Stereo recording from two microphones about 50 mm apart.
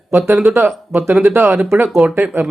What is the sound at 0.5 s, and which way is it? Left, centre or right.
Speech, right.